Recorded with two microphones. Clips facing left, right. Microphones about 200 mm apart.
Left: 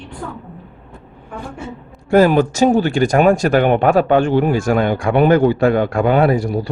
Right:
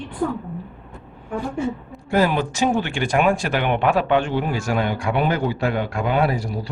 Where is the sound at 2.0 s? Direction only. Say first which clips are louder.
Left 8 dB; 45° left (ahead or behind).